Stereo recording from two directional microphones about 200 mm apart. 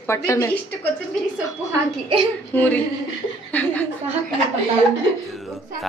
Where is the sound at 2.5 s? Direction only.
10° left (ahead or behind).